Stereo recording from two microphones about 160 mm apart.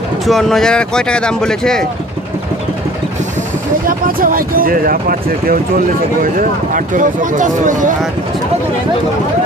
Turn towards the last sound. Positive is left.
turn(degrees=-55)  # may be behind; listen again after turning